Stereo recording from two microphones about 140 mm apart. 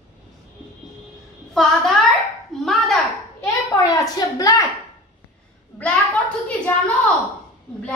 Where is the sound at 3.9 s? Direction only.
30° left (ahead or behind).